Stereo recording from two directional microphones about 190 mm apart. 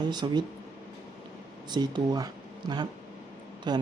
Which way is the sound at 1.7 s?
25° right (ahead or behind).